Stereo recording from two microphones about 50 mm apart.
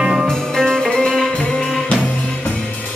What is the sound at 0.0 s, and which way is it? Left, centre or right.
Music, centre.